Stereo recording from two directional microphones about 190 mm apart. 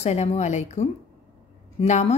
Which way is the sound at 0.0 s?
35° left (ahead or behind).